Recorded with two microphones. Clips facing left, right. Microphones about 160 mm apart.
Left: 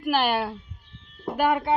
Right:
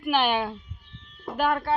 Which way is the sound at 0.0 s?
5° left (ahead or behind).